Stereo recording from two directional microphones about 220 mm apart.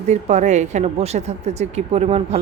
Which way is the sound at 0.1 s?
30° right (ahead or behind).